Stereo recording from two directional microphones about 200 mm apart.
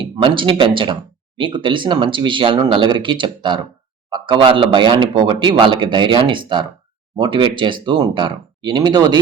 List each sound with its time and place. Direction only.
0.0 s speech: 25° right (ahead or behind)